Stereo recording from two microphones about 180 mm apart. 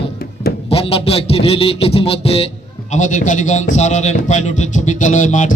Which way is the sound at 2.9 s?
45° left (ahead or behind).